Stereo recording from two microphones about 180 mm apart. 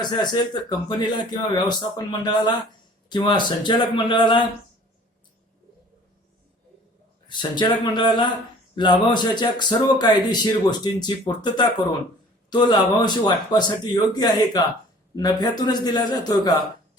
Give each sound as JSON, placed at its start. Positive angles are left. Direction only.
{"t": 0.0, "sound": "speech", "side_deg": 25}
{"t": 7.3, "sound": "speech", "side_deg": 25}